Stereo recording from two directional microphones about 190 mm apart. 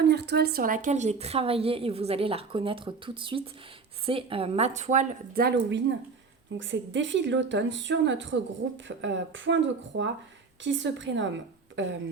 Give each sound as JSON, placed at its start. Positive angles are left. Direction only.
{"t": 0.0, "sound": "a woman's voice", "side_deg": -60}
{"t": 6.6, "sound": "a woman's voice", "side_deg": -75}